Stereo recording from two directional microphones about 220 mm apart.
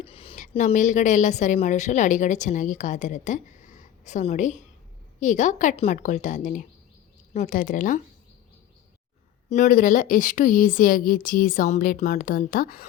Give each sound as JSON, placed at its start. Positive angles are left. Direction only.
{"t": 0.0, "sound": "speech", "side_deg": 25}
{"t": 9.5, "sound": "speech", "side_deg": 35}